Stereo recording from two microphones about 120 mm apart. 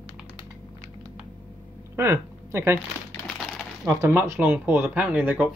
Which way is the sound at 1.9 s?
20° right (ahead or behind).